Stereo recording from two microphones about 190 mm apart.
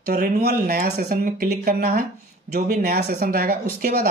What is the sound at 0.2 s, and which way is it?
Speech, 55° right (ahead or behind).